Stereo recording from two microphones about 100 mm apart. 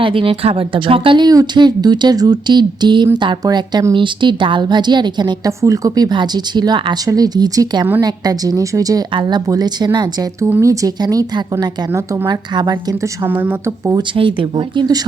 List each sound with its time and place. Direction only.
0.0 s speech: 60° right (ahead or behind)
5.5 s a woman's voice: 35° right (ahead or behind)
6.1 s a woman's voice: 50° right (ahead or behind)
9.1 s a woman's voice: 50° right (ahead or behind)
13.2 s speech: 20° right (ahead or behind)
14.2 s speech: 60° right (ahead or behind)